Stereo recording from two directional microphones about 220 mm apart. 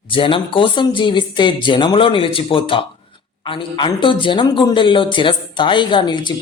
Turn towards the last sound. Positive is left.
turn(degrees=20)  # may be behind; listen again after turning